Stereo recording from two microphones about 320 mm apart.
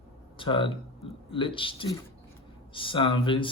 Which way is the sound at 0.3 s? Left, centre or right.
Centre.